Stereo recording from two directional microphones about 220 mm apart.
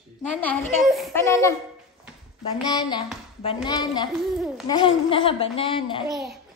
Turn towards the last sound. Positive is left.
turn(degrees=0)  # may be behind; listen again after turning